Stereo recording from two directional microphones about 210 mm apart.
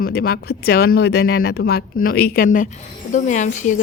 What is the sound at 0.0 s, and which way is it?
Speech, 50° left (ahead or behind).